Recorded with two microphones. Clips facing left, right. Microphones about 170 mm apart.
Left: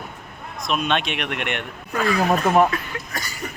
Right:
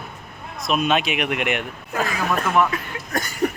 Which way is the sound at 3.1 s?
50° right (ahead or behind).